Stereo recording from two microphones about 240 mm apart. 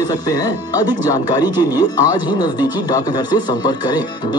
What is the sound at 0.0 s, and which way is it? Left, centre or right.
Speech, centre.